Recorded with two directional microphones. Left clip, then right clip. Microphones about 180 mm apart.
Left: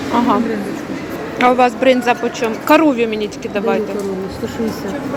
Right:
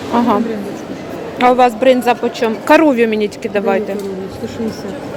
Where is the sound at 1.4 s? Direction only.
20° right (ahead or behind).